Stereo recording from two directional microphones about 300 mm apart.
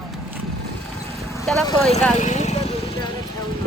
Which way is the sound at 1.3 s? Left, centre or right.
Centre.